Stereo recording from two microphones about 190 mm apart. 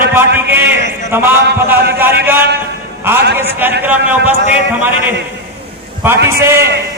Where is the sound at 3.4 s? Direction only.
10° right (ahead or behind).